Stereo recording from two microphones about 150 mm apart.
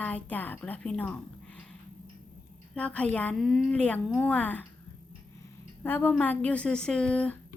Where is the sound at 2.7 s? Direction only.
10° left (ahead or behind).